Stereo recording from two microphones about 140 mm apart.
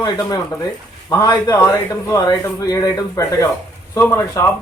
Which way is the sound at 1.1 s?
25° left (ahead or behind).